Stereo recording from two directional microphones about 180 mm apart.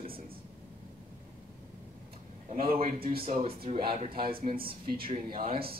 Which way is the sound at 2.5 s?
50° right (ahead or behind).